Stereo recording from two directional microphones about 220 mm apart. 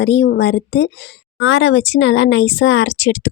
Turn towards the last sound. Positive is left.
turn(degrees=55)  # may be behind; listen again after turning